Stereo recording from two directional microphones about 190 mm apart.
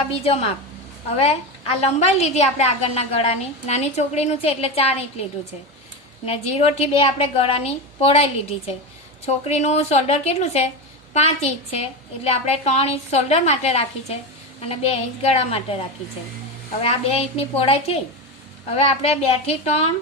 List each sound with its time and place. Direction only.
0.1 s a woman's voice: 30° left (ahead or behind)
6.2 s a woman's voice: 35° left (ahead or behind)
12.2 s a woman's voice: 35° left (ahead or behind)
16.8 s a woman's voice: 30° left (ahead or behind)